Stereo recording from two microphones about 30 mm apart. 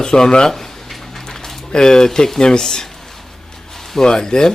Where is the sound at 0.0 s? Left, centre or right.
Left.